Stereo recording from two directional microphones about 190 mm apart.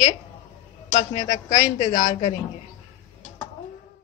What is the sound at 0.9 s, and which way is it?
A man's voice, 35° left (ahead or behind).